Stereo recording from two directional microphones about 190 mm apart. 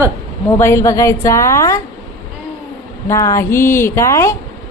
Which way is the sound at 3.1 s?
15° left (ahead or behind).